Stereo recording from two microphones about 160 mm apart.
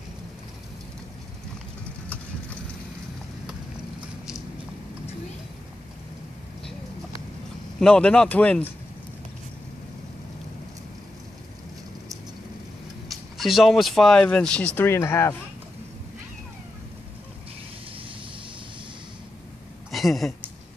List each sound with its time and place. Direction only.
7.8 s speech: 5° left (ahead or behind)
13.1 s speech: centre (ahead or behind); by 15.3 s 15° left (ahead or behind)
19.9 s a sound: centre (ahead or behind)